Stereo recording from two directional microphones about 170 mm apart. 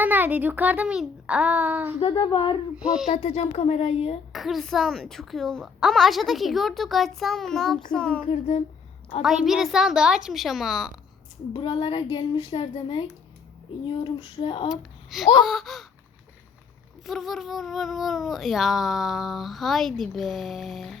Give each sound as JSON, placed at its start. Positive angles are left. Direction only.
{"t": 0.0, "sound": "a child's voice", "side_deg": -10}
{"t": 2.0, "sound": "a woman's voice", "side_deg": 30}
{"t": 2.7, "sound": "speech", "side_deg": -5}
{"t": 3.1, "sound": "speech", "side_deg": 40}
{"t": 4.3, "sound": "speech", "side_deg": 0}
{"t": 8.2, "sound": "a sound", "side_deg": 45}
{"t": 9.2, "sound": "speech", "side_deg": 0}
{"t": 11.5, "sound": "a woman's voice", "side_deg": 30}
{"t": 14.7, "sound": "a child's voice", "side_deg": 0}
{"t": 17.1, "sound": "speech", "side_deg": 0}